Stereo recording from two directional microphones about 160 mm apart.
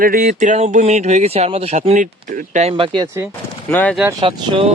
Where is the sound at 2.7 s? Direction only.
30° right (ahead or behind).